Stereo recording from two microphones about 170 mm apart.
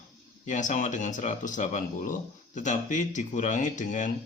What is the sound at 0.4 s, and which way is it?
Speech, 45° left (ahead or behind).